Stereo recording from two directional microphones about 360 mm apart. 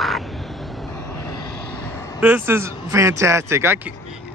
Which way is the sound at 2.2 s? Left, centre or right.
Centre.